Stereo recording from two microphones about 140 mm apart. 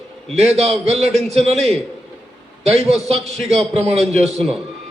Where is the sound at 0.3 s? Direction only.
50° right (ahead or behind).